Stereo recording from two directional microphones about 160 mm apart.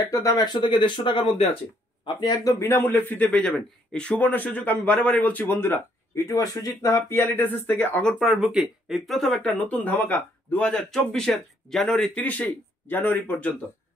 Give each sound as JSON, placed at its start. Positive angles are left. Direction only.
{"t": 0.1, "sound": "speech", "side_deg": 20}